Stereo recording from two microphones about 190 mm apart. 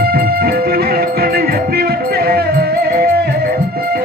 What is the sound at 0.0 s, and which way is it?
Music, 55° right (ahead or behind).